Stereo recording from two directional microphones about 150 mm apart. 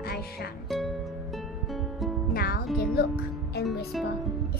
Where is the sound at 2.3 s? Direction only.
90° left.